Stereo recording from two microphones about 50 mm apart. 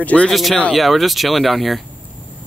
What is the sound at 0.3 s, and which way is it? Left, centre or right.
Speech, centre.